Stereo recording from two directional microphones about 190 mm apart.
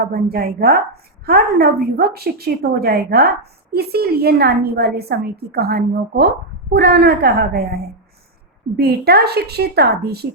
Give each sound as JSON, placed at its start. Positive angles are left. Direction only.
{"t": 0.0, "sound": "a woman's voice", "side_deg": -55}
{"t": 8.7, "sound": "a woman's voice", "side_deg": -55}